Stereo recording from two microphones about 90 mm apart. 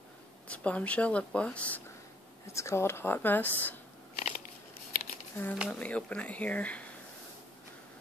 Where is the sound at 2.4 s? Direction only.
30° left (ahead or behind).